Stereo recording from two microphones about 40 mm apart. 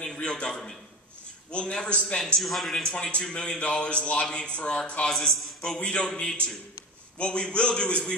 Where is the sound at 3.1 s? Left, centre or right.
Left.